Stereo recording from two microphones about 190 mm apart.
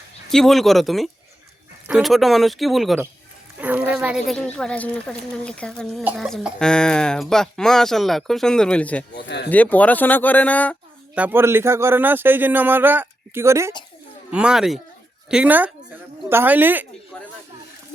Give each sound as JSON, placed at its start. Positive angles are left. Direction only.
{"t": 0.3, "sound": "speech", "side_deg": 0}
{"t": 9.1, "sound": "speech", "side_deg": 65}
{"t": 9.5, "sound": "speech", "side_deg": 10}
{"t": 11.1, "sound": "speech", "side_deg": -10}
{"t": 17.1, "sound": "speech", "side_deg": 5}